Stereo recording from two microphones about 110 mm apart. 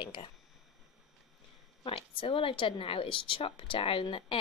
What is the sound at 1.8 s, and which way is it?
Speech, 50° left (ahead or behind).